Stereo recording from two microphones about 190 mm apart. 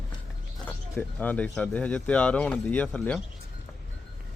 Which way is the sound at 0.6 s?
10° left (ahead or behind).